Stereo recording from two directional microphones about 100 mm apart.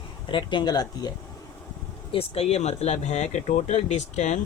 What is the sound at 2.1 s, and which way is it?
Speech, 75° left (ahead or behind).